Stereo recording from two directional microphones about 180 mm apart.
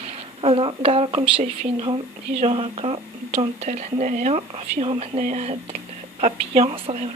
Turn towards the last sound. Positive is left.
turn(degrees=-35)  # may be behind; listen again after turning